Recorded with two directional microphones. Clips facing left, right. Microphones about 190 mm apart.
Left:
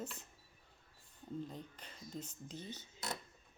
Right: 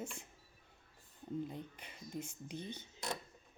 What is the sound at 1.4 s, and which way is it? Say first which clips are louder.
Speech: right 3 dB; 10° right (ahead or behind).